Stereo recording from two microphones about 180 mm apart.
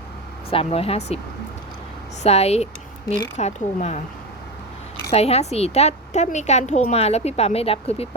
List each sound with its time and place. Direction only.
0.5 s a woman's voice: 30° left (ahead or behind)
2.2 s a woman's voice: 35° left (ahead or behind)
5.1 s a woman's voice: 35° left (ahead or behind)